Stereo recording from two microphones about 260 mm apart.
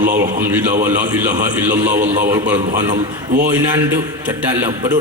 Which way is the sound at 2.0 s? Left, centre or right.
Right.